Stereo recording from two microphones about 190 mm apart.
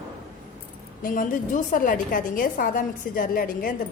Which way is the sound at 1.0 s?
45° left (ahead or behind).